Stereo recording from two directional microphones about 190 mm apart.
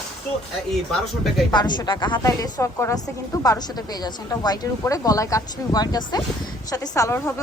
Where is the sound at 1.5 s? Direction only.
20° left (ahead or behind).